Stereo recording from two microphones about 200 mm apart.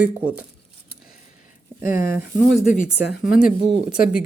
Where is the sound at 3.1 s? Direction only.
45° left (ahead or behind).